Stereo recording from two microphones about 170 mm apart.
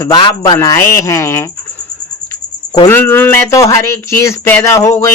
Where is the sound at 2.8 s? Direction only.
15° left (ahead or behind).